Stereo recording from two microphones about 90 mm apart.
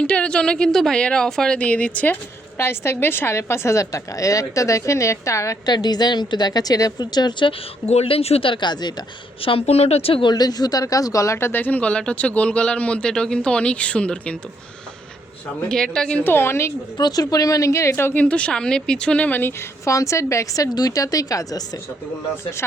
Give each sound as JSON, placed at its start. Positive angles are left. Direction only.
{"t": 0.0, "sound": "speech", "side_deg": 10}
{"t": 2.6, "sound": "a woman's voice", "side_deg": 30}
{"t": 5.6, "sound": "a woman's voice", "side_deg": 50}
{"t": 8.0, "sound": "a woman's voice", "side_deg": 90}
{"t": 9.4, "sound": "speech", "side_deg": 90}
{"t": 10.3, "sound": "speech", "side_deg": 45}
{"t": 15.7, "sound": "speech", "side_deg": 10}
{"t": 16.2, "sound": "a woman's voice", "side_deg": 25}
{"t": 17.0, "sound": "a woman's voice", "side_deg": 45}
{"t": 18.1, "sound": "a woman's voice", "side_deg": 15}